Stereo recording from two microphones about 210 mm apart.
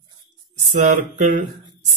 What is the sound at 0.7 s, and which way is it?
Mantra, 35° right (ahead or behind).